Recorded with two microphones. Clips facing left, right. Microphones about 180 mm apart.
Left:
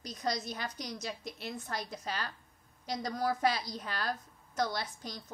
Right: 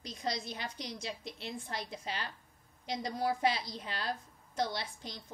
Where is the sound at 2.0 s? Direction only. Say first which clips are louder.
Left 2 dB; 20° right (ahead or behind).